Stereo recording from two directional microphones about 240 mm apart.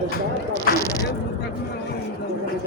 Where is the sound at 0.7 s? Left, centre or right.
Left.